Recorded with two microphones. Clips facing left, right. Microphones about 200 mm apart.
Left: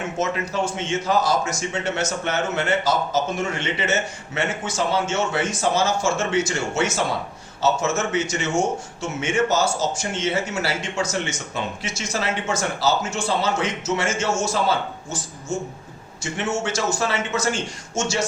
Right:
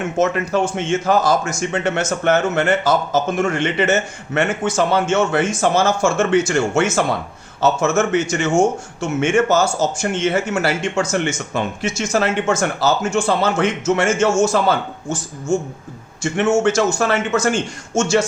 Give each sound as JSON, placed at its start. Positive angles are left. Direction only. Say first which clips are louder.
{"t": 0.5, "sound": "speech", "louder": "right 5 dB", "side_deg": -55}
{"t": 16.2, "sound": "speech", "louder": "right 9 dB", "side_deg": -50}